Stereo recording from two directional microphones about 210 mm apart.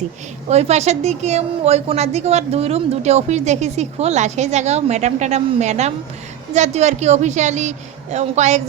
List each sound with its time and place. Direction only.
0.4 s a woman's voice: 30° right (ahead or behind)